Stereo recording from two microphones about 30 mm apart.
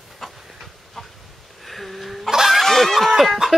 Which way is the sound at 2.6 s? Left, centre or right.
Centre.